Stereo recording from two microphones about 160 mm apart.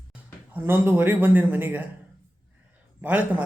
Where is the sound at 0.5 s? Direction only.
15° right (ahead or behind).